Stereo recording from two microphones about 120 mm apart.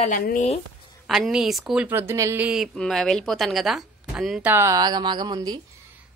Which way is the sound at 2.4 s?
5° right (ahead or behind).